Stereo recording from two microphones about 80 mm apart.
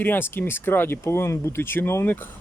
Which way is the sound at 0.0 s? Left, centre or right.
Left.